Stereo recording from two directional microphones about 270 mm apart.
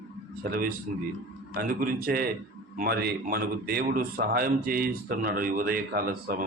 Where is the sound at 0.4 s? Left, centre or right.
Right.